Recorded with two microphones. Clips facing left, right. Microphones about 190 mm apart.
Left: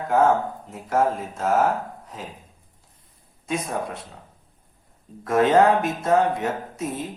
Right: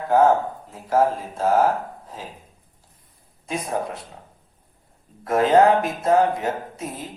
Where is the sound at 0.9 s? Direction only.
30° right (ahead or behind).